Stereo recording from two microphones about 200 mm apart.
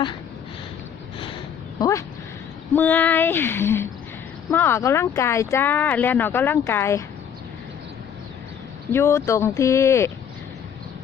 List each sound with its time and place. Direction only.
1.8 s speech: 15° left (ahead or behind)
8.9 s speech: 15° left (ahead or behind)